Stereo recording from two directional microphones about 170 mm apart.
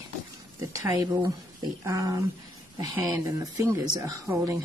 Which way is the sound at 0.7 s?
20° right (ahead or behind).